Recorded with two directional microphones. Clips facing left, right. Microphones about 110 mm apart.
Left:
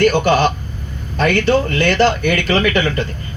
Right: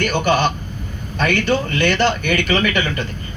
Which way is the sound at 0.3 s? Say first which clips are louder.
Left 3 dB; 35° left (ahead or behind).